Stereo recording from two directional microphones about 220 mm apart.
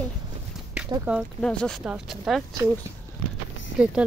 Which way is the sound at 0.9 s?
5° right (ahead or behind).